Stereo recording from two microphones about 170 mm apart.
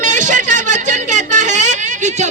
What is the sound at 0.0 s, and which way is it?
A woman's voice, 50° right (ahead or behind).